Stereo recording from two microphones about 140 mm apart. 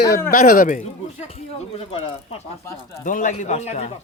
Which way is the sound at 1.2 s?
45° left (ahead or behind).